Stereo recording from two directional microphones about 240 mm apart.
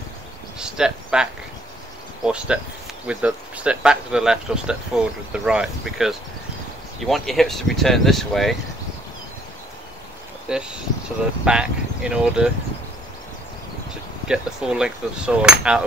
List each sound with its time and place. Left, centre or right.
0.6 s speech: centre
10.5 s speech: centre
14.2 s speech: centre